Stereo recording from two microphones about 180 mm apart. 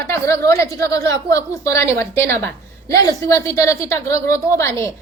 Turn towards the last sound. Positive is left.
turn(degrees=15)  # may be behind; listen again after turning